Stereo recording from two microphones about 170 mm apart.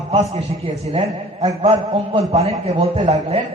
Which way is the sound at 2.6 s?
35° right (ahead or behind).